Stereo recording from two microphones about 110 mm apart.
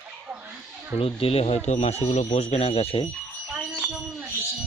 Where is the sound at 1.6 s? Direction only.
85° left; by 3.0 s 65° left (ahead or behind).